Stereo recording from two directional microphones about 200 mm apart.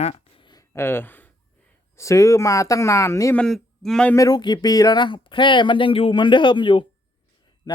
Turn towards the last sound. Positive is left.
turn(degrees=25)  # may be behind; listen again after turning